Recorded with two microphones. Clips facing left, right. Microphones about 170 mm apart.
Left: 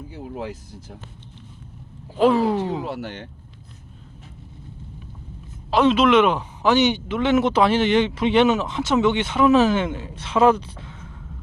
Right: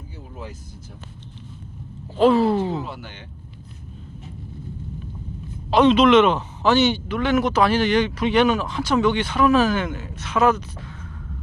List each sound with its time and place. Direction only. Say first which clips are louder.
0.2 s vehicle: left 7 dB; 75° left (ahead or behind)
2.1 s speech: right 1 dB; 10° left (ahead or behind)
2.8 s speech: left 6 dB; 65° left (ahead or behind)
5.7 s speech: right 2 dB; 5° left (ahead or behind); by 11.1 s 25° left (ahead or behind)